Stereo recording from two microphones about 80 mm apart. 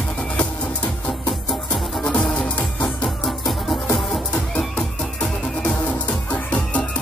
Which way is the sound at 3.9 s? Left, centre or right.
Centre.